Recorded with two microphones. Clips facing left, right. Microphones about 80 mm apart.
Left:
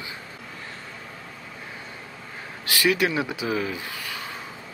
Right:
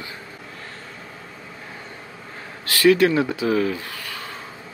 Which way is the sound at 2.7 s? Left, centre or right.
Centre.